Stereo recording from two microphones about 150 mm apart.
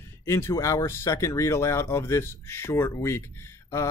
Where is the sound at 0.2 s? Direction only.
20° left (ahead or behind).